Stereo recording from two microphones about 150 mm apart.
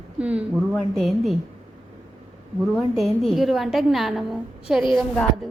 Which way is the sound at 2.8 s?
Centre (ahead or behind).